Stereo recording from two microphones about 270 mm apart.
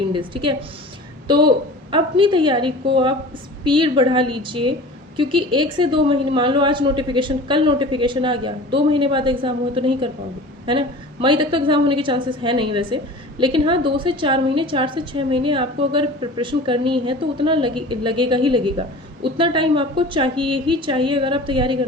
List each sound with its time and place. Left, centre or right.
0.1 s a woman's voice: centre